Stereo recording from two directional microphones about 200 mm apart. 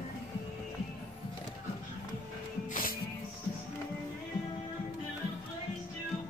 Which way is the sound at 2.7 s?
45° left (ahead or behind).